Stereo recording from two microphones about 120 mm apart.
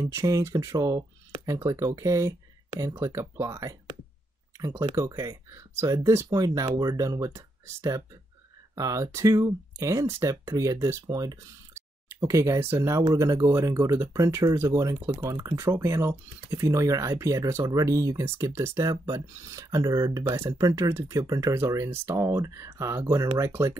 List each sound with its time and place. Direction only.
0.0 s speech: 25° right (ahead or behind)